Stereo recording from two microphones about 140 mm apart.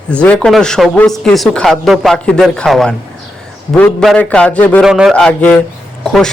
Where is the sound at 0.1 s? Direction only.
10° left (ahead or behind).